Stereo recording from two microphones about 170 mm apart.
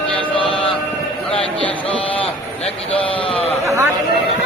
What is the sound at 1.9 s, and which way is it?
Speech, 30° left (ahead or behind).